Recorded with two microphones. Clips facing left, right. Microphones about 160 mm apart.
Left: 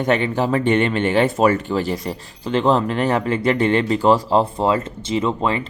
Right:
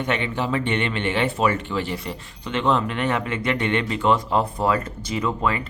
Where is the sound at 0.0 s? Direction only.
40° left (ahead or behind).